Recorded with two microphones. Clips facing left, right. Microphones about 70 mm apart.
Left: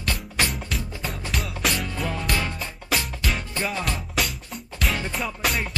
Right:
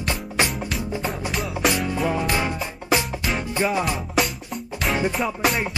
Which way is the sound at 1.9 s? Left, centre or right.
Centre.